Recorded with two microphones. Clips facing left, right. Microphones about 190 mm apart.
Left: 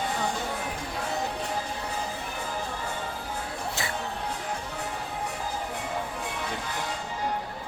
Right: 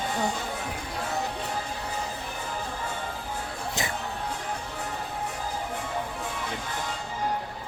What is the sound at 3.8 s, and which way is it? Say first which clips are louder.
Music: right 4 dB; 15° right (ahead or behind).